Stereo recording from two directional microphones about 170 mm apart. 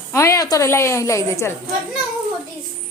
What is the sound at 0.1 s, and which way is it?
A woman's voice, 20° left (ahead or behind).